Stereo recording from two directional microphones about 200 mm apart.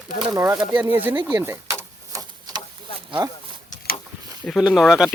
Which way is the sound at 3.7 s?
40° left (ahead or behind).